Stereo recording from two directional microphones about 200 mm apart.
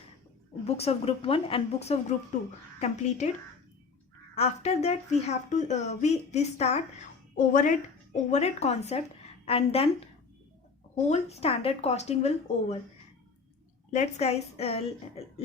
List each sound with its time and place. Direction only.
0.6 s speech: 30° left (ahead or behind)
4.4 s a woman's voice: 30° left (ahead or behind)
11.1 s speech: 30° left (ahead or behind)
13.9 s speech: 35° left (ahead or behind)